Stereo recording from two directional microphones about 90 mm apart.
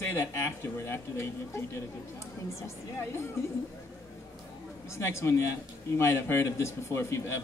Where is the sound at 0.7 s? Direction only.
30° left (ahead or behind).